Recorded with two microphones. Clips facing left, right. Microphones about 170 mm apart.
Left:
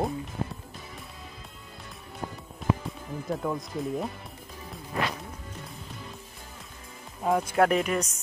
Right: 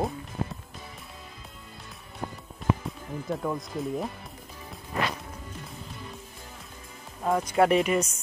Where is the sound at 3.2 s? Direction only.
Centre (ahead or behind).